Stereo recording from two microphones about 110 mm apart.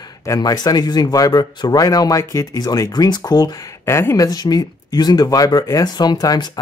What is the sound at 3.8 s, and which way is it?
Speech, 25° left (ahead or behind).